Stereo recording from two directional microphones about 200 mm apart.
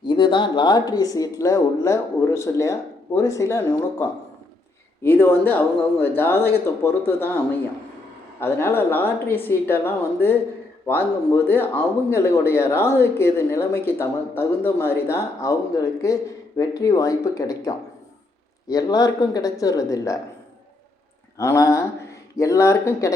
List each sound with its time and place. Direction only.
0.0 s a man's voice: 25° left (ahead or behind)
5.0 s a man's voice: 10° left (ahead or behind)
8.4 s a man's voice: 10° left (ahead or behind)
21.3 s a man's voice: 15° left (ahead or behind)